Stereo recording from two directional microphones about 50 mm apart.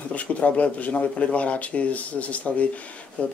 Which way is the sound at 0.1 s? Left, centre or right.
Left.